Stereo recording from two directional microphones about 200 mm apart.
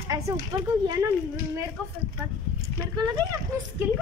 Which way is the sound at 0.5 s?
20° right (ahead or behind).